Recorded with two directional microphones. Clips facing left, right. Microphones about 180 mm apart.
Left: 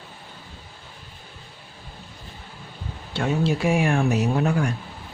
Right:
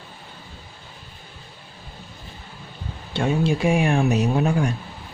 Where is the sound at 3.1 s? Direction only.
20° right (ahead or behind).